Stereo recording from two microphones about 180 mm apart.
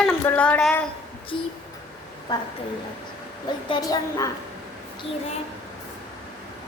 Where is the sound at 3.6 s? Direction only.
25° left (ahead or behind).